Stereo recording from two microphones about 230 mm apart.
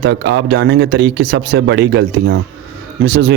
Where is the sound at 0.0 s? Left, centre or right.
Right.